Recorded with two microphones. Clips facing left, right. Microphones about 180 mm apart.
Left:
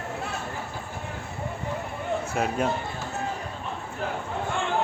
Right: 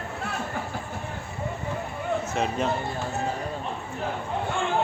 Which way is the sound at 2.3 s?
5° left (ahead or behind).